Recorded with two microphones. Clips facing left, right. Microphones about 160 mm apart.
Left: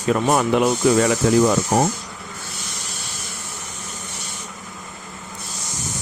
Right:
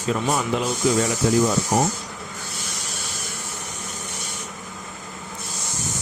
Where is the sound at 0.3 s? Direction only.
60° left (ahead or behind); by 1.5 s 90° left.